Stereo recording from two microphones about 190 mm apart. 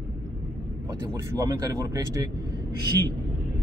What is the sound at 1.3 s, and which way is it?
Speech, 20° right (ahead or behind).